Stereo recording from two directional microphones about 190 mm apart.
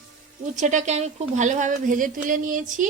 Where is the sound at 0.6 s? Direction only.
40° right (ahead or behind).